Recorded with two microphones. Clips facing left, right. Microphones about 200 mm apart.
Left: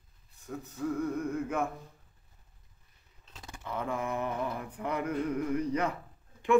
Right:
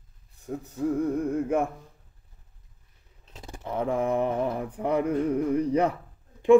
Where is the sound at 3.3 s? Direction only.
30° right (ahead or behind).